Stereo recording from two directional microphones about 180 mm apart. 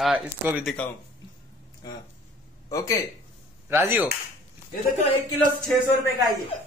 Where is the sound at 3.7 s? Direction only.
10° right (ahead or behind).